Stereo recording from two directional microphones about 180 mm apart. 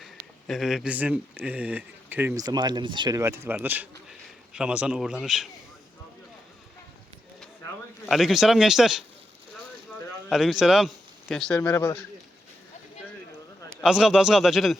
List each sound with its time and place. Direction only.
0.0 s speech: centre (ahead or behind)
8.1 s speech: centre (ahead or behind)
10.2 s speech: centre (ahead or behind)
11.6 s speech: 15° left (ahead or behind)
13.8 s speech: 5° right (ahead or behind)